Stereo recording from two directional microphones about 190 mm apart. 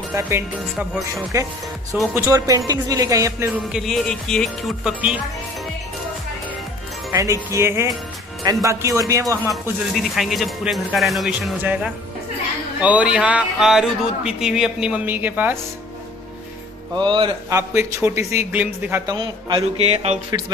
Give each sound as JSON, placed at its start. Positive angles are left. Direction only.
{"t": 1.3, "sound": "speech", "side_deg": -15}
{"t": 7.1, "sound": "speech", "side_deg": -15}
{"t": 9.5, "sound": "speech", "side_deg": 0}
{"t": 16.9, "sound": "music", "side_deg": -25}
{"t": 17.5, "sound": "speech", "side_deg": -15}
{"t": 19.1, "sound": "speech", "side_deg": -25}
{"t": 20.2, "sound": "music", "side_deg": -20}